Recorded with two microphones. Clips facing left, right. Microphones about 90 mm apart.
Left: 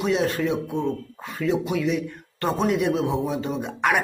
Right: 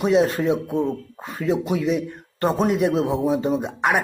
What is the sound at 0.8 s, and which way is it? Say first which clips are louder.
Speech: right 2 dB; 10° right (ahead or behind).